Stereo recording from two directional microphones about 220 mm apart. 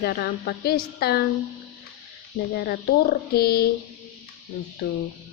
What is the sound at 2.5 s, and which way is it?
A woman's voice, 45° left (ahead or behind).